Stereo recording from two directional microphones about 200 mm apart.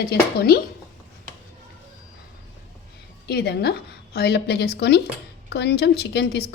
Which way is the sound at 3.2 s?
55° left (ahead or behind).